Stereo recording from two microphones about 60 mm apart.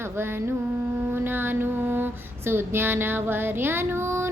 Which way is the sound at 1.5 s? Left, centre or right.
Right.